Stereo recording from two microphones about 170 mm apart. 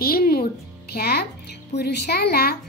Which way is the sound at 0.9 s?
65° left (ahead or behind).